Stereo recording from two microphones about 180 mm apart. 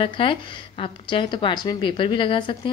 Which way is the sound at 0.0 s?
30° left (ahead or behind).